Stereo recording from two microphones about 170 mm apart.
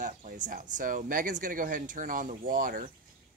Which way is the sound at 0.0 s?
50° right (ahead or behind).